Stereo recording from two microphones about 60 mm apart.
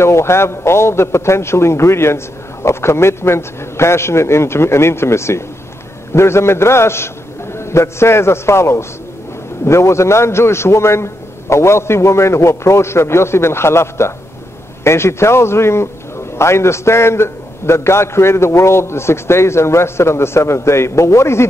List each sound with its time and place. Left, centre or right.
0.0 s a man's voice: left